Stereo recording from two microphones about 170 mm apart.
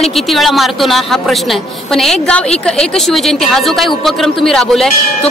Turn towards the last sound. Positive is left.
turn(degrees=5)  # may be behind; listen again after turning